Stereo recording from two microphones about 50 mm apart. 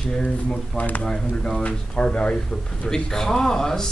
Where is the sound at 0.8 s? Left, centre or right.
Left.